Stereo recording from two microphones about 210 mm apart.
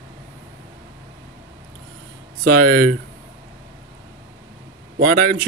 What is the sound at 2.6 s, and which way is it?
Speech, 45° right (ahead or behind).